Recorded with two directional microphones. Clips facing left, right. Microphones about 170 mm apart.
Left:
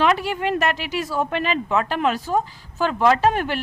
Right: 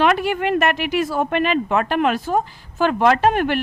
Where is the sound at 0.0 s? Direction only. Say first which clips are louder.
Right 2 dB; 55° right (ahead or behind).